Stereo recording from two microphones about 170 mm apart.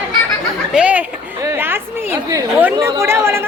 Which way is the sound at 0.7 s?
10° right (ahead or behind).